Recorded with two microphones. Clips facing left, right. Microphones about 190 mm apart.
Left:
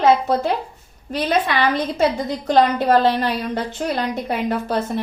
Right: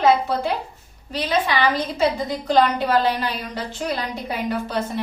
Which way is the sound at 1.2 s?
50° left (ahead or behind).